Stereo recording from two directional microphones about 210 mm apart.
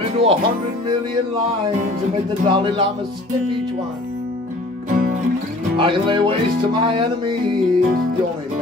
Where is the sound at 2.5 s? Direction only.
25° right (ahead or behind).